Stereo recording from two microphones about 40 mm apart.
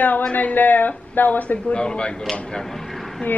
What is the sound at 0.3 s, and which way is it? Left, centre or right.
Speech, left.